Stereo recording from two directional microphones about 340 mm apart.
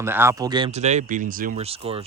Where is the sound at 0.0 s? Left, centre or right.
Centre.